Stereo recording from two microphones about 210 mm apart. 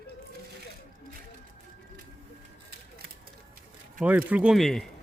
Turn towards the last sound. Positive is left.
turn(degrees=0)  # may be behind; listen again after turning